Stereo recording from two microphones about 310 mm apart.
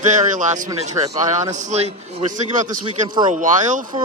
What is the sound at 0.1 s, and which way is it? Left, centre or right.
Speech, right.